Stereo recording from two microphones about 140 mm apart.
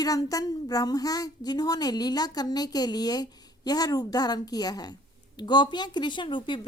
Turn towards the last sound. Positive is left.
turn(degrees=35)  # may be behind; listen again after turning